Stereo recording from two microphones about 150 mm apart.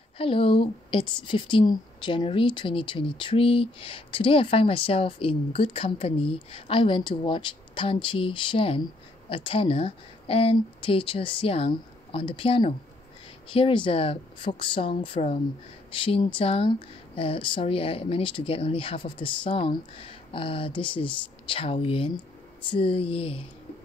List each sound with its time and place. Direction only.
0.2 s a woman's voice: 35° left (ahead or behind)